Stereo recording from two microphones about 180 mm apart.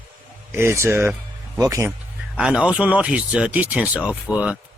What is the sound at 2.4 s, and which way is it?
Speech, 5° right (ahead or behind).